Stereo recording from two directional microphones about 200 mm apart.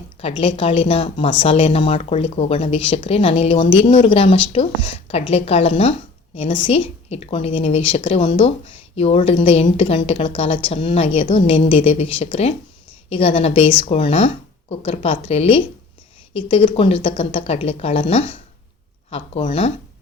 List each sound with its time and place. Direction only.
0.2 s speech: 30° left (ahead or behind)